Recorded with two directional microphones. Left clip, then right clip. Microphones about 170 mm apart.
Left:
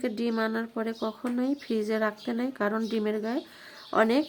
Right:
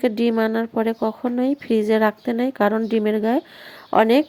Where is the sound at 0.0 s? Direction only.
35° right (ahead or behind).